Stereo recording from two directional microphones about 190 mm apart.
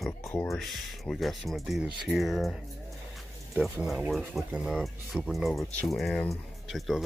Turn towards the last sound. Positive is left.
turn(degrees=0)  # may be behind; listen again after turning